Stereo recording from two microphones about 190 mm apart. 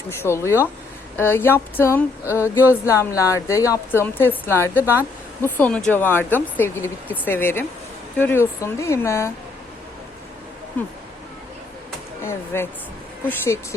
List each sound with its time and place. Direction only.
0.2 s speech: 15° left (ahead or behind)
12.2 s speech: 15° left (ahead or behind)